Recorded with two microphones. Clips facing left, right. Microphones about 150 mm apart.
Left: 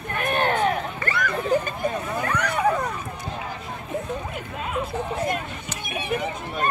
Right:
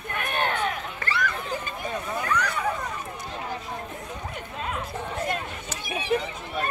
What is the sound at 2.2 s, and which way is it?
Vehicle, 55° left (ahead or behind).